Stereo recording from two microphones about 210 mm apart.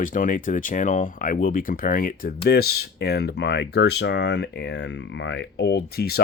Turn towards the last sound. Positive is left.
turn(degrees=50)  # may be behind; listen again after turning